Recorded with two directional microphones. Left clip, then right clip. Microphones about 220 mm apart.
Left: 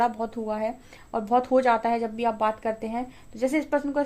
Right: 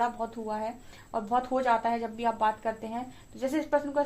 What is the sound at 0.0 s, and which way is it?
Speech, 50° left (ahead or behind).